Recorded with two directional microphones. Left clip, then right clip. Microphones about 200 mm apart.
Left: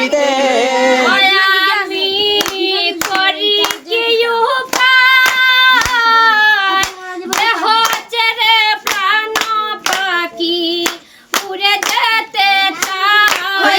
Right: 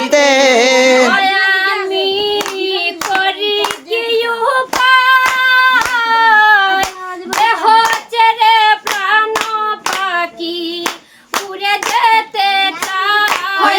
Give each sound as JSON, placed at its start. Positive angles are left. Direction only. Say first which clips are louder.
{"t": 0.1, "sound": "music", "louder": "right 3 dB", "side_deg": -45}
{"t": 1.2, "sound": "child singing", "louder": "left 1 dB", "side_deg": -5}
{"t": 3.2, "sound": "hands", "louder": "left 2 dB", "side_deg": -15}